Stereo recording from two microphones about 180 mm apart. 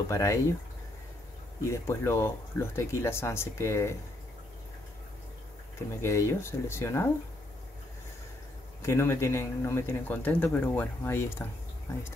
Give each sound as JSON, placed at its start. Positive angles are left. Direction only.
{"t": 0.1, "sound": "speech", "side_deg": 15}
{"t": 1.7, "sound": "speech", "side_deg": 15}
{"t": 5.8, "sound": "speech", "side_deg": 15}
{"t": 8.8, "sound": "speech", "side_deg": 15}